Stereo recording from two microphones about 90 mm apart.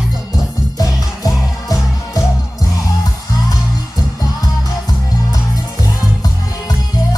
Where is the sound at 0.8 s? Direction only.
40° left (ahead or behind).